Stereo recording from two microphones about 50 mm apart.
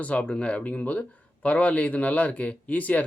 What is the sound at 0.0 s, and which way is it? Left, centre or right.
Speech, left.